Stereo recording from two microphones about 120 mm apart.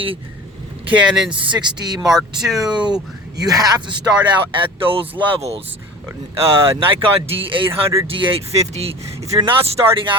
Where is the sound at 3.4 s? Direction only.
35° right (ahead or behind).